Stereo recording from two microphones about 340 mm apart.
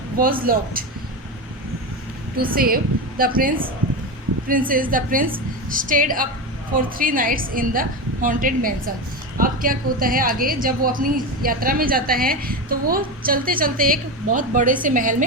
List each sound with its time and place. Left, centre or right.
0.2 s a woman's voice: right
2.4 s a woman's voice: right